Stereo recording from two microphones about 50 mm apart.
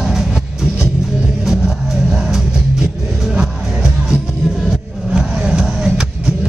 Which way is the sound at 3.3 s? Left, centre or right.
Centre.